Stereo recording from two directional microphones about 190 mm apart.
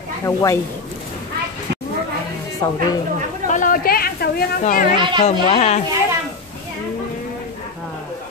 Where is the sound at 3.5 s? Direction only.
45° left (ahead or behind).